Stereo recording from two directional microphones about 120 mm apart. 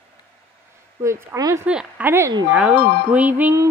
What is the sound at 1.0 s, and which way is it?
Speech, 25° right (ahead or behind).